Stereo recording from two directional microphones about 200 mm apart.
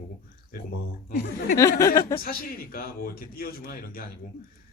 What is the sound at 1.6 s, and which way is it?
Speech, 15° left (ahead or behind).